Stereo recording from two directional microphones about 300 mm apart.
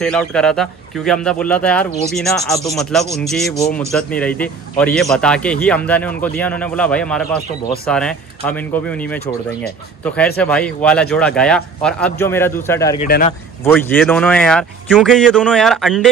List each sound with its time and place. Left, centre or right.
0.0 s a man's voice: centre
13.0 s speech: left
13.7 s a man's voice: centre